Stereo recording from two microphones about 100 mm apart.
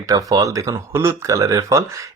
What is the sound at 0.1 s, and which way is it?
Speech, 35° right (ahead or behind).